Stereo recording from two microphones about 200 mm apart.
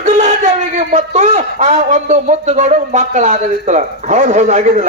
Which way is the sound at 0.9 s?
35° right (ahead or behind).